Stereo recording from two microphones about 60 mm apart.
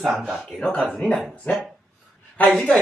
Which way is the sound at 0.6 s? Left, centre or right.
Centre.